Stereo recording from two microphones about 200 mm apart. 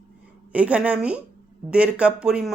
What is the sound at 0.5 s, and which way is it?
Speech, 5° right (ahead or behind).